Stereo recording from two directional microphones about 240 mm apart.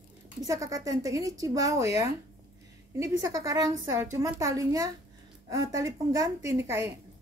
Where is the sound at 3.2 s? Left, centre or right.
Centre.